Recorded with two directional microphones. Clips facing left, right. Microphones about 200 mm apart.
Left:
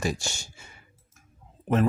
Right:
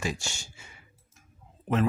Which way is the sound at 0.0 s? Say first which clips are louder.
Left 4 dB; 40° left (ahead or behind).